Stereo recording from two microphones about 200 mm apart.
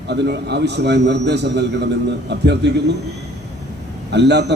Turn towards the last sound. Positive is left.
turn(degrees=-60)  # may be behind; listen again after turning